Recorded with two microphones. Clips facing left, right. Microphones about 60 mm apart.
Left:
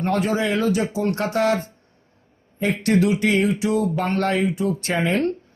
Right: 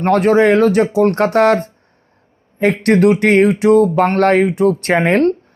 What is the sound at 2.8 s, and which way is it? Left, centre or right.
Speech, right.